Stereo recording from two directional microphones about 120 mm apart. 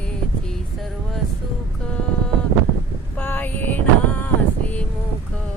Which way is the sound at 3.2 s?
15° left (ahead or behind).